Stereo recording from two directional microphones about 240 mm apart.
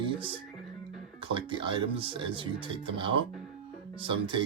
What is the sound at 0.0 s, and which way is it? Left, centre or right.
Music, right.